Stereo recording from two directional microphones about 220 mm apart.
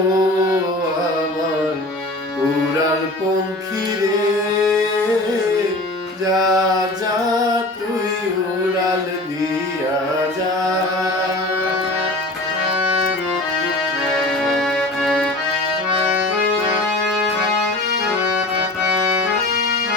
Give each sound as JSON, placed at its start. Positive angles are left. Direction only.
{"t": 6.3, "sound": "music", "side_deg": -15}
{"t": 14.4, "sound": "music", "side_deg": 0}